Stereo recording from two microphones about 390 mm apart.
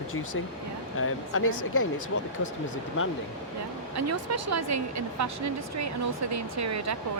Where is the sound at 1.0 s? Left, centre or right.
Left.